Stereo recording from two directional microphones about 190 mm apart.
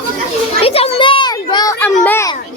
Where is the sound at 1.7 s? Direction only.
10° left (ahead or behind).